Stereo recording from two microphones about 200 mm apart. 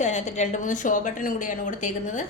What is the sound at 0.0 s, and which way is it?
A woman's voice, 35° left (ahead or behind).